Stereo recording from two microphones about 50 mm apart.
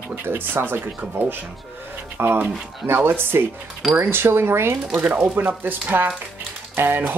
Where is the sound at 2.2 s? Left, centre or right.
Right.